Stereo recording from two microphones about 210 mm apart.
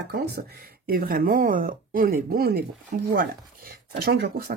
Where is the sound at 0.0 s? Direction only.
55° right (ahead or behind).